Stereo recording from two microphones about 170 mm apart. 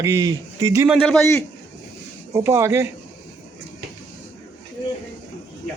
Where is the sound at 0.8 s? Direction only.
Centre (ahead or behind).